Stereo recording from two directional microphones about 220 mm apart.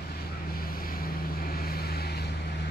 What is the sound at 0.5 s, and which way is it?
Vehicle, 40° left (ahead or behind).